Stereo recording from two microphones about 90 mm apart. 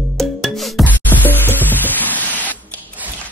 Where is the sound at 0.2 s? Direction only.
Centre (ahead or behind).